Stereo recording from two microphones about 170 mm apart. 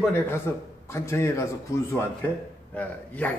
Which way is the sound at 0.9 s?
15° left (ahead or behind).